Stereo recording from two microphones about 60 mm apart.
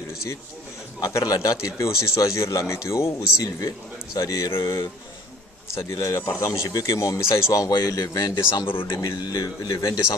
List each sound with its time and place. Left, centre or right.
1.0 s speech: left
3.6 s speech: left
4.5 s a man's voice: left
7.2 s speech: left
7.6 s speech: left
8.5 s speech: left